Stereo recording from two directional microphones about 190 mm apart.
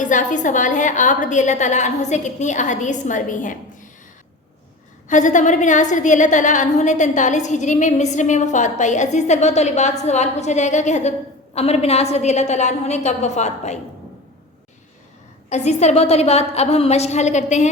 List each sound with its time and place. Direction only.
0.0 s a woman's voice: 40° left (ahead or behind)
5.0 s a woman's voice: 40° left (ahead or behind)
15.4 s a woman's voice: 35° left (ahead or behind)